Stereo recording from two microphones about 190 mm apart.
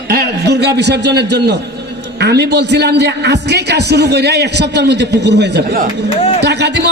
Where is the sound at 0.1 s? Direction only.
60° right (ahead or behind).